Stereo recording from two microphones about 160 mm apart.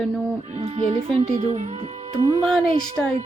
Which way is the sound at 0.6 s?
40° right (ahead or behind).